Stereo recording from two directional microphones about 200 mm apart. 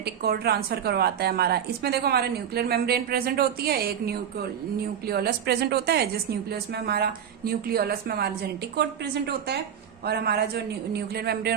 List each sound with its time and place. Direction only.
0.0 s a woman's voice: 55° right (ahead or behind)